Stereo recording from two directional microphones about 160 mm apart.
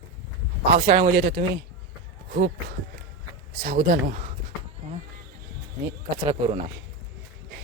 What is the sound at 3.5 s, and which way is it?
Speech, 70° right (ahead or behind).